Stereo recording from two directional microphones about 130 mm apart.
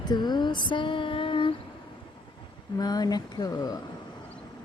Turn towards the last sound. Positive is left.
turn(degrees=30)  # may be behind; listen again after turning